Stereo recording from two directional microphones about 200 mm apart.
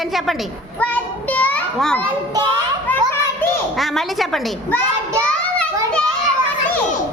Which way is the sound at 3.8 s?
Centre (ahead or behind).